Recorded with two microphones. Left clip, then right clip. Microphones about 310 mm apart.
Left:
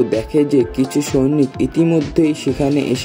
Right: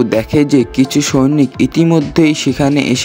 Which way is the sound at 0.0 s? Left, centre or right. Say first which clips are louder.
Right 3 dB; right.